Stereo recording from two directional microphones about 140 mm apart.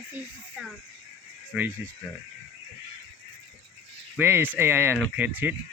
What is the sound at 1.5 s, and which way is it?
Speech, 5° right (ahead or behind).